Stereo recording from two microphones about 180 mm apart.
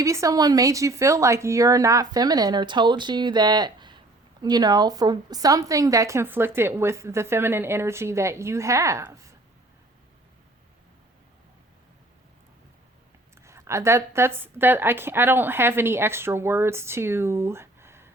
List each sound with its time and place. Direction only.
0.0 s speech: 15° right (ahead or behind)
13.4 s speech: 15° right (ahead or behind)